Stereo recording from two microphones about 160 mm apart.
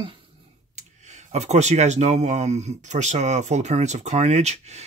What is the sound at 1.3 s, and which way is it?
Speech, 45° right (ahead or behind).